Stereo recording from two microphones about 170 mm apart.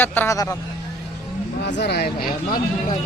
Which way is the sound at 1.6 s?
90° left.